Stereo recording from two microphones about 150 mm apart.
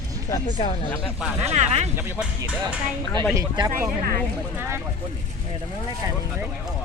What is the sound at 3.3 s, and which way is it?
Speech, 25° right (ahead or behind).